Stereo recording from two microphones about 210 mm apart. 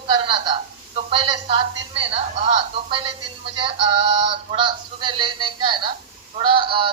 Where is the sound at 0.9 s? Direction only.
25° right (ahead or behind).